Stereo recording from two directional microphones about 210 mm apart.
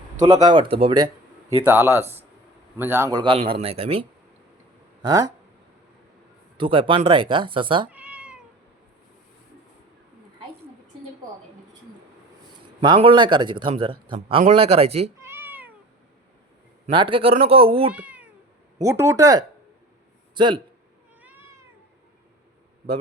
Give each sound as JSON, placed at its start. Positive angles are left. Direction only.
{"t": 0.3, "sound": "speech", "side_deg": -20}
{"t": 5.0, "sound": "speech", "side_deg": -15}
{"t": 6.6, "sound": "speech", "side_deg": -25}
{"t": 7.9, "sound": "cat", "side_deg": -5}
{"t": 12.8, "sound": "speech", "side_deg": -25}
{"t": 15.2, "sound": "cat", "side_deg": -10}
{"t": 16.9, "sound": "speech", "side_deg": -25}
{"t": 17.9, "sound": "cat", "side_deg": -5}
{"t": 18.8, "sound": "a man's voice", "side_deg": -15}
{"t": 21.2, "sound": "cat", "side_deg": -10}